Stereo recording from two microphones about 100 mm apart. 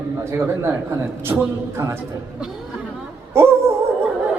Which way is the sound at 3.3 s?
25° right (ahead or behind).